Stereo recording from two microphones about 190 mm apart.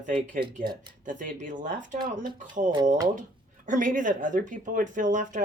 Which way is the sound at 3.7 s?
45° right (ahead or behind).